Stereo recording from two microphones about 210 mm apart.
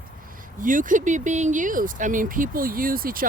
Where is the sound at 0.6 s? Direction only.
40° right (ahead or behind).